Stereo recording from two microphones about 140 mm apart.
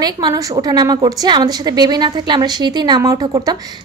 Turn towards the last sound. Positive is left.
turn(degrees=-30)  # may be behind; listen again after turning